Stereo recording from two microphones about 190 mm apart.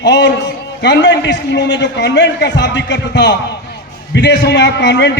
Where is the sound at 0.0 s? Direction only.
65° left (ahead or behind).